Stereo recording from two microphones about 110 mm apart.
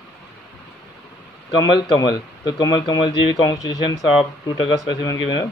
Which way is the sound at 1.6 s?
35° left (ahead or behind).